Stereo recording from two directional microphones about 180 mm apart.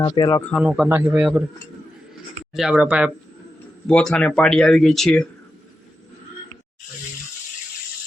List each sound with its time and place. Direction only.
0.0 s speech: 25° left (ahead or behind)
0.6 s a man's voice: 5° right (ahead or behind)
2.6 s a man's voice: 5° right (ahead or behind)
3.8 s speech: 5° left (ahead or behind)